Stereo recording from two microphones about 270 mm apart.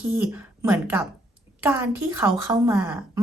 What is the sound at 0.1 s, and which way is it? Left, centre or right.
Speech, centre.